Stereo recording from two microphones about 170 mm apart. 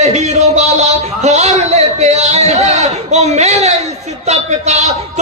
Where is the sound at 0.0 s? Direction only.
40° right (ahead or behind).